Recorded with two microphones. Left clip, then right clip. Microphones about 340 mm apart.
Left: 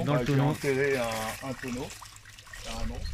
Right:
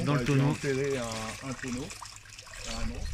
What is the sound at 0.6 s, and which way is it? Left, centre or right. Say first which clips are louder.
Speech: left 4 dB; left.